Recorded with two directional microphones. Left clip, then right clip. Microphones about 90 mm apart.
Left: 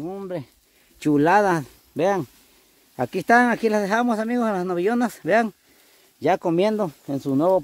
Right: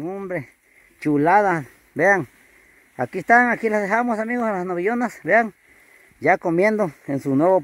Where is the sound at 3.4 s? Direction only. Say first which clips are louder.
Right 1 dB; 90° left.